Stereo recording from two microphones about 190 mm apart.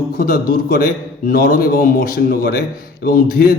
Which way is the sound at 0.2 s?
50° left (ahead or behind).